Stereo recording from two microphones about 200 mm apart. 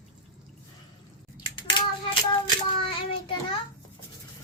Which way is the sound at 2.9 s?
25° left (ahead or behind).